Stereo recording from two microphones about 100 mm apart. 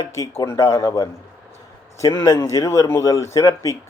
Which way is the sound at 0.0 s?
30° left (ahead or behind).